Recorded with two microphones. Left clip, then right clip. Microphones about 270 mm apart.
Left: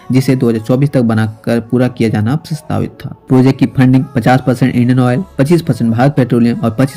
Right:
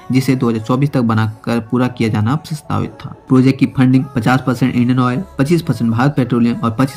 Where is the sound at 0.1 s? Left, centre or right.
Centre.